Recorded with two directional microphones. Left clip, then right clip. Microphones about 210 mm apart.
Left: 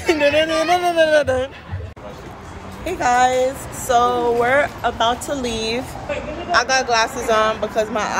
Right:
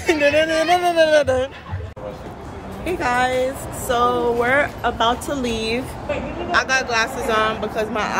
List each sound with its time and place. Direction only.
0.0 s speech: 5° right (ahead or behind)
2.8 s a woman's voice: 5° right (ahead or behind)